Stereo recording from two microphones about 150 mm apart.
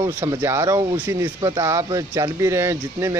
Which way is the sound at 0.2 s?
20° right (ahead or behind).